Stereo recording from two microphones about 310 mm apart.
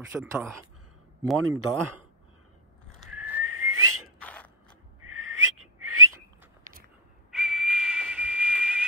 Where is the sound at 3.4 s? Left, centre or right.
Right.